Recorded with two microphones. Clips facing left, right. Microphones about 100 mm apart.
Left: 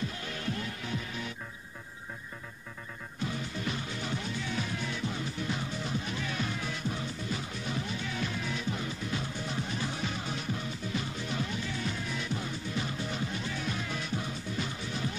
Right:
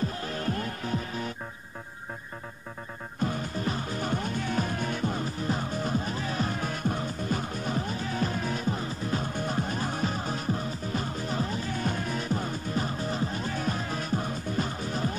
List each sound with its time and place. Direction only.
0.2 s music: 40° right (ahead or behind)
3.2 s music: 45° right (ahead or behind)